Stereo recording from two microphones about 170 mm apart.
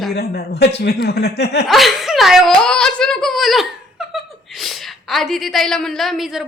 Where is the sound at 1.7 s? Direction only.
Centre (ahead or behind).